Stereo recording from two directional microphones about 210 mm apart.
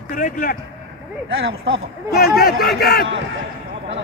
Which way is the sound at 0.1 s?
40° left (ahead or behind).